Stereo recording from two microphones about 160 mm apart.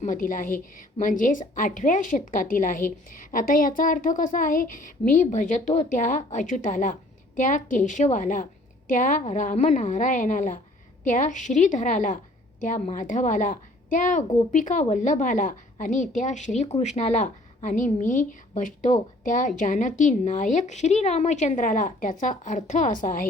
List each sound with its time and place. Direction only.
0.0 s a woman's voice: 55° left (ahead or behind)